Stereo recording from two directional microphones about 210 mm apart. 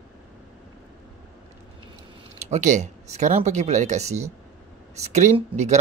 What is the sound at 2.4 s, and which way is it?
Speech, 35° right (ahead or behind).